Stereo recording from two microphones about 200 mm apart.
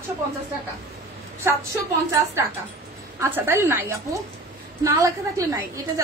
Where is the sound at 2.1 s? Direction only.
10° right (ahead or behind).